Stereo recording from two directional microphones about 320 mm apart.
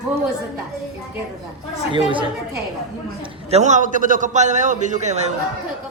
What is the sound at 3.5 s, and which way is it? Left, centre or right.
A man's voice, right.